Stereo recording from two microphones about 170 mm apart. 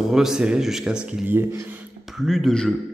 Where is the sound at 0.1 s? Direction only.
Centre (ahead or behind).